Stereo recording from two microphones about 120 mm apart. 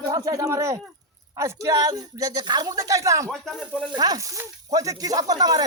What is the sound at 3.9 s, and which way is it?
Speech, 30° right (ahead or behind).